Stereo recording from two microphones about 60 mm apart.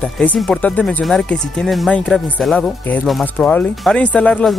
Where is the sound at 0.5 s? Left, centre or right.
Left.